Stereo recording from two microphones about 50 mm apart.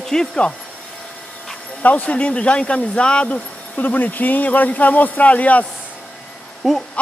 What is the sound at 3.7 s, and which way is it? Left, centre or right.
Speech, left.